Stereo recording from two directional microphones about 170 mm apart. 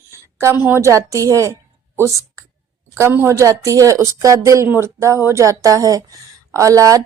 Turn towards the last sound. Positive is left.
turn(degrees=-20)  # may be behind; listen again after turning